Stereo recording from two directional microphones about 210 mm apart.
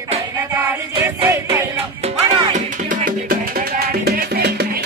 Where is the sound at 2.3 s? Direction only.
35° right (ahead or behind).